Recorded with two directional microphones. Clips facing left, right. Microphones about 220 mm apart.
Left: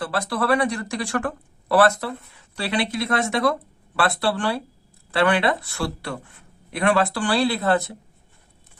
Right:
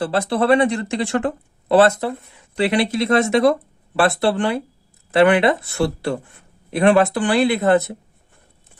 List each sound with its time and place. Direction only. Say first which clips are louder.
0.0 s speech: right 6 dB; 25° right (ahead or behind)